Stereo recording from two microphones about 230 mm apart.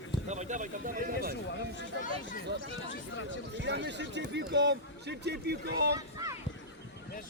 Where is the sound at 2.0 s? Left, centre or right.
Left.